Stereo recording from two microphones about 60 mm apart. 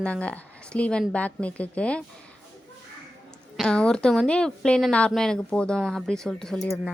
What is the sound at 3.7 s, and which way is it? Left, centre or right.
Speech, centre.